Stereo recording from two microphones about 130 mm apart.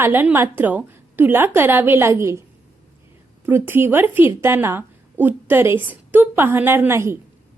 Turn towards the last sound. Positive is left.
turn(degrees=-20)  # may be behind; listen again after turning